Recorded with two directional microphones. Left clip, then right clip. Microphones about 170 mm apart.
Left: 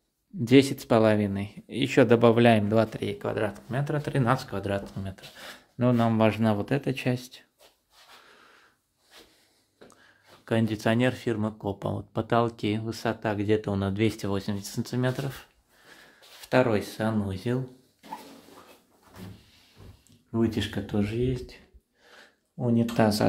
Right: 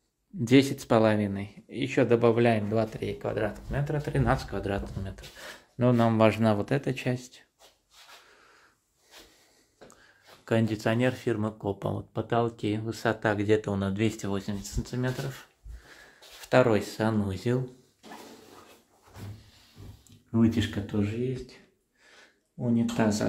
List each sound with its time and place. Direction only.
0.4 s speech: 5° left (ahead or behind); by 7.4 s 25° left (ahead or behind)
8.3 s snort: 20° left (ahead or behind)
9.8 s speech: 5° left (ahead or behind)
12.1 s speech: 20° left (ahead or behind); by 13.5 s centre (ahead or behind)
13.5 s speech: 20° left (ahead or behind); by 15.1 s 40° left (ahead or behind)
16.4 s speech: centre (ahead or behind)
20.2 s speech: centre (ahead or behind)
20.9 s speech: 25° left (ahead or behind)
22.6 s speech: 25° left (ahead or behind)